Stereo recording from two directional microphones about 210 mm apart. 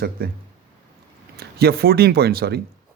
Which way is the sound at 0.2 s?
45° right (ahead or behind).